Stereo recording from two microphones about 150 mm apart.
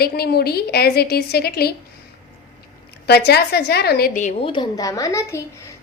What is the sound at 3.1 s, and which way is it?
A woman's voice, 90° left.